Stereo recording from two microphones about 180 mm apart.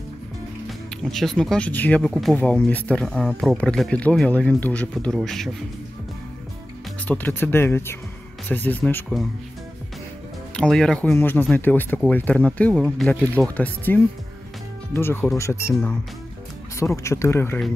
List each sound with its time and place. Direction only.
0.7 s speech: centre (ahead or behind)
7.1 s speech: 10° left (ahead or behind)
10.5 s speech: 5° left (ahead or behind)
16.7 s speech: 15° left (ahead or behind)